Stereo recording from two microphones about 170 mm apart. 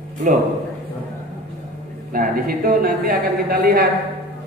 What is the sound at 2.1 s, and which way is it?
A man's voice, 60° right (ahead or behind).